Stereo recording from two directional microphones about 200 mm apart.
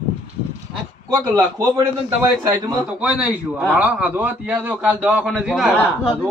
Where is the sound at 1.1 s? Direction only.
20° right (ahead or behind); by 6.1 s centre (ahead or behind).